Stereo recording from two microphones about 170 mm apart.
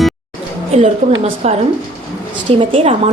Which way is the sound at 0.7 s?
40° right (ahead or behind).